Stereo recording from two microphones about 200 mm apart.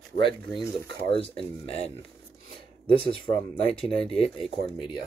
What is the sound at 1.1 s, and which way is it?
Speech, 25° left (ahead or behind).